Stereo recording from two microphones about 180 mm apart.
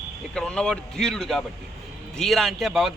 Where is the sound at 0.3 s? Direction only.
5° left (ahead or behind).